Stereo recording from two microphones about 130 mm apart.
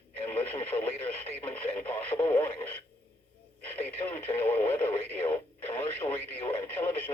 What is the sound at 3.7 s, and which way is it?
Speech, 15° left (ahead or behind).